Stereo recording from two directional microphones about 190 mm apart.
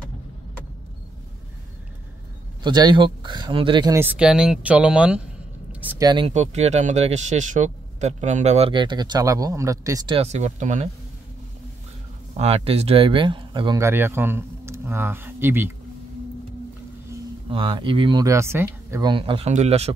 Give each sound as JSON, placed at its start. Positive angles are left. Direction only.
{"t": 2.6, "sound": "speech", "side_deg": -25}
{"t": 6.0, "sound": "speech", "side_deg": -25}
{"t": 6.3, "sound": "speech", "side_deg": -35}
{"t": 12.4, "sound": "speech", "side_deg": -30}
{"t": 17.5, "sound": "speech", "side_deg": -25}